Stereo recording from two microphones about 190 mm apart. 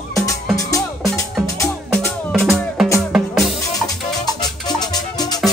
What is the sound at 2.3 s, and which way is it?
Music, centre (ahead or behind).